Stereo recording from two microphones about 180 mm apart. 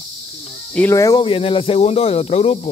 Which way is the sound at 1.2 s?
30° left (ahead or behind).